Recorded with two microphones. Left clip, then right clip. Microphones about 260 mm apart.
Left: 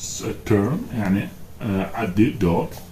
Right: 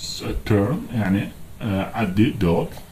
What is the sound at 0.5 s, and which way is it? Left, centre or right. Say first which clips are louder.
Speech: even; centre.